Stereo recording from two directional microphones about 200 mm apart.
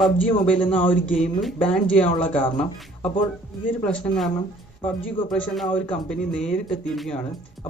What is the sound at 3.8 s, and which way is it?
Speech, 5° left (ahead or behind).